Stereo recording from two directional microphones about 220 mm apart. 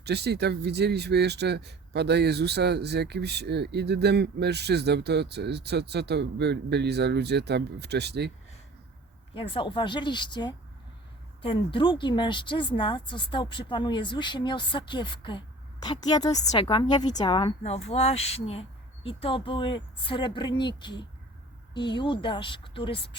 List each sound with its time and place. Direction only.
0.0 s speech: 50° right (ahead or behind)
9.3 s speech: 25° left (ahead or behind)